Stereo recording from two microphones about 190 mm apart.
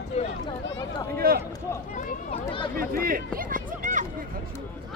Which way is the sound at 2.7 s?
50° right (ahead or behind).